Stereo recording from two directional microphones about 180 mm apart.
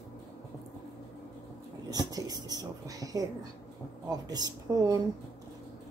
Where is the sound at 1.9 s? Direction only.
20° right (ahead or behind).